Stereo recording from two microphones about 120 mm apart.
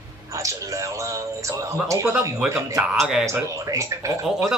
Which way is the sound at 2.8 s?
5° right (ahead or behind).